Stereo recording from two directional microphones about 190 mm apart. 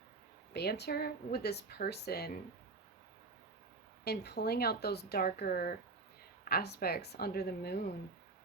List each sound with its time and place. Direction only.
0.5 s speech: 60° left (ahead or behind)
4.0 s speech: 55° left (ahead or behind)